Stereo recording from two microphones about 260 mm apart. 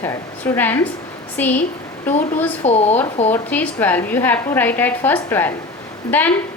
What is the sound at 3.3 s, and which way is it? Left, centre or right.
A woman's voice, centre.